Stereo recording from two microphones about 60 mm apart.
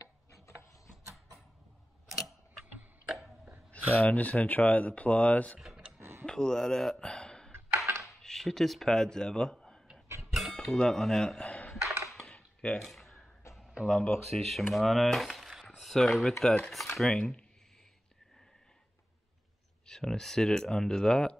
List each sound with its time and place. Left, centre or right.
0.0 s tick-tock: left
3.1 s hiccup: centre
4.0 s speech: left
5.9 s tick-tock: right
6.2 s a sound: centre
8.2 s speech: centre
10.3 s a sound: centre
12.8 s a sound: centre
13.6 s a sound: centre
13.8 s speech: centre
17.1 s speech: centre
19.9 s speech: centre